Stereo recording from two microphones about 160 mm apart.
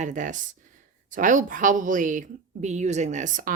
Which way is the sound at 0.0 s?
50° right (ahead or behind).